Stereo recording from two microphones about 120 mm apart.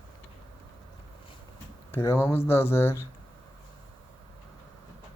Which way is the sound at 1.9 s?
20° left (ahead or behind).